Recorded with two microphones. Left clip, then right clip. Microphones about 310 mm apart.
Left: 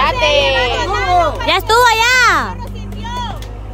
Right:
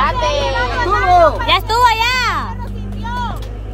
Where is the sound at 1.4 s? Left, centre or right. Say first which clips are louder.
Left 1 dB; centre.